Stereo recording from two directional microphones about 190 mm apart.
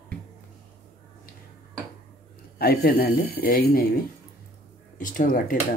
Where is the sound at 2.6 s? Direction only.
50° left (ahead or behind).